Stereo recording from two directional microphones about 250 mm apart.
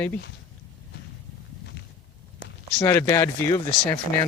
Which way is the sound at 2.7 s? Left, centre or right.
Centre.